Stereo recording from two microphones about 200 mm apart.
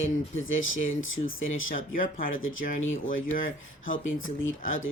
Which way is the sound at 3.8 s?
80° left.